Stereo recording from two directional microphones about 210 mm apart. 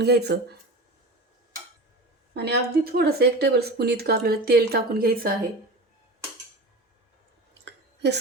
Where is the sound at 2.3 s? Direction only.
50° right (ahead or behind).